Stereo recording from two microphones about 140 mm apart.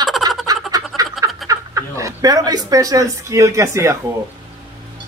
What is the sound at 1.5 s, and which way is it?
Speech, 20° right (ahead or behind).